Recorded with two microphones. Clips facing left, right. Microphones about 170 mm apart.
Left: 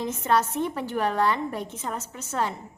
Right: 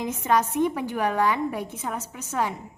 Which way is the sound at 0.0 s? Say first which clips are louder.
Right 1 dB; 15° right (ahead or behind).